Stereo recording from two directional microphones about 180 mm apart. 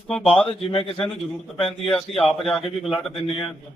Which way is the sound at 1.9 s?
Centre (ahead or behind).